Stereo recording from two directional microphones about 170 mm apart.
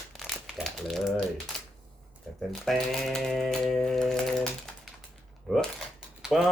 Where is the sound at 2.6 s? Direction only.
Centre (ahead or behind).